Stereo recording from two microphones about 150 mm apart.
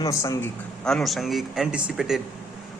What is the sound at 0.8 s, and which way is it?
A man's voice, centre (ahead or behind).